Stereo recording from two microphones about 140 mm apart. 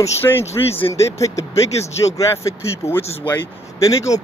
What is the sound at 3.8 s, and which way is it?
Speech, 25° left (ahead or behind).